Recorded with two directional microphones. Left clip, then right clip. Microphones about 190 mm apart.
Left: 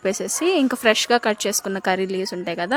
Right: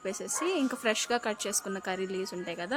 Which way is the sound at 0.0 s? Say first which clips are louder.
Left 11 dB; 40° left (ahead or behind).